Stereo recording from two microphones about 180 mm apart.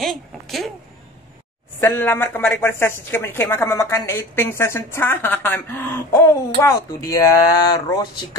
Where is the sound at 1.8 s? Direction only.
10° left (ahead or behind).